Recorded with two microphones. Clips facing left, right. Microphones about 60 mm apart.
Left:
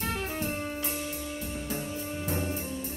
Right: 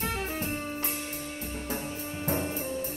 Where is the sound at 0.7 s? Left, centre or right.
Right.